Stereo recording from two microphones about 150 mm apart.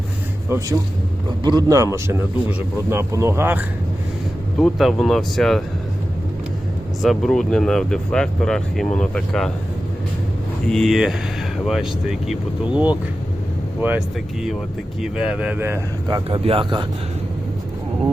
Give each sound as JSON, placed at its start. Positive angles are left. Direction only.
{"t": 0.5, "sound": "speech", "side_deg": -20}
{"t": 4.5, "sound": "speech", "side_deg": 0}
{"t": 7.0, "sound": "speech", "side_deg": 0}
{"t": 10.7, "sound": "speech", "side_deg": 0}
{"t": 15.0, "sound": "speech", "side_deg": -5}
{"t": 16.0, "sound": "speech", "side_deg": -25}